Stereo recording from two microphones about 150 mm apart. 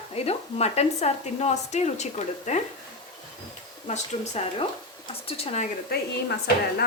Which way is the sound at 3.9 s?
50° left (ahead or behind).